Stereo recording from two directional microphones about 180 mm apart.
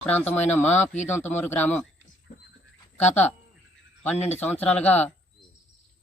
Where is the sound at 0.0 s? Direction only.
10° left (ahead or behind).